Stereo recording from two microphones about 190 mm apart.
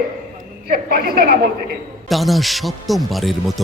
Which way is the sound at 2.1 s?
Centre (ahead or behind).